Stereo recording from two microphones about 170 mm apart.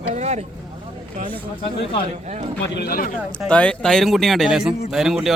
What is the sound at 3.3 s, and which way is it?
Speech, 5° left (ahead or behind).